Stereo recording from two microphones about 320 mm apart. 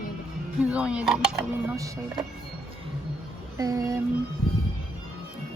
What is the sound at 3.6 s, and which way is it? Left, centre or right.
Speech, centre.